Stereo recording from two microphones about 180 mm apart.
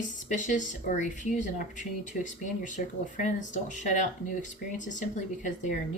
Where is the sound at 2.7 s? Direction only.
45° left (ahead or behind).